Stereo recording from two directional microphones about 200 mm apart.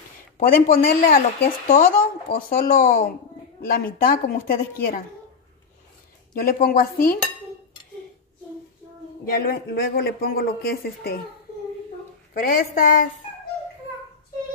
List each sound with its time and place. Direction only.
0.4 s a woman's voice: 45° left (ahead or behind)
6.3 s a woman's voice: 45° left (ahead or behind)
9.2 s a woman's voice: 45° left (ahead or behind)
12.4 s a woman's voice: 45° left (ahead or behind)